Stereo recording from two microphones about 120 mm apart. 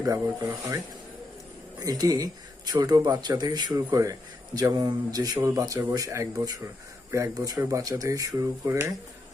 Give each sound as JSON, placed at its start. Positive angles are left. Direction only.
{"t": 0.0, "sound": "speech", "side_deg": -30}
{"t": 1.8, "sound": "speech", "side_deg": -30}